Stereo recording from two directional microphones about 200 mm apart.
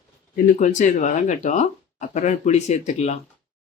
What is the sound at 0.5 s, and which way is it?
Speech, 35° left (ahead or behind).